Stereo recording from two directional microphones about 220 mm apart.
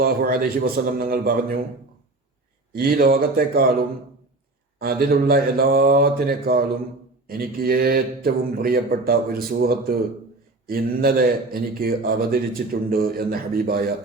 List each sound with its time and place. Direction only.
0.0 s a man's voice: 45° right (ahead or behind)
2.7 s a man's voice: 45° right (ahead or behind)